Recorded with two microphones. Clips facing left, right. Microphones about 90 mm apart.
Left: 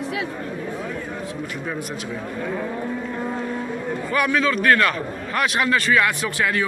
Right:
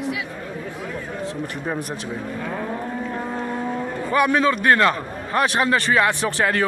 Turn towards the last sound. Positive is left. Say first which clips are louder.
# right 2 dB
turn(degrees=-35)  # may be behind; listen again after turning